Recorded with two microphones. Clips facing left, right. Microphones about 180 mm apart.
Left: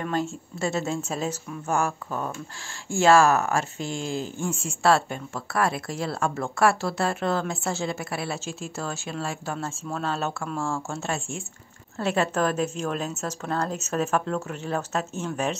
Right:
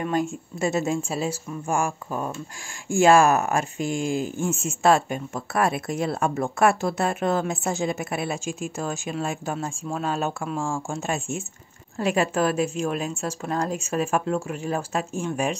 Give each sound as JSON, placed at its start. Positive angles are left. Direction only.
{"t": 0.0, "sound": "speech", "side_deg": -15}